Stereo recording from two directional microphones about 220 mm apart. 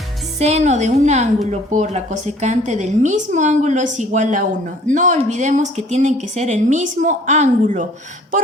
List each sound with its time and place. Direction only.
0.3 s a woman's voice: 30° right (ahead or behind)